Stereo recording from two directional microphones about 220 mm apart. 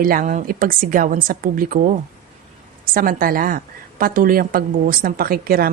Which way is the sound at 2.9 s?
40° right (ahead or behind).